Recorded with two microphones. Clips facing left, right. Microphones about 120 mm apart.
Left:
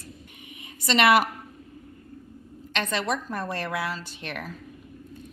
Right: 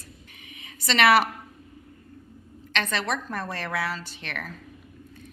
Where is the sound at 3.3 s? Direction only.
5° left (ahead or behind).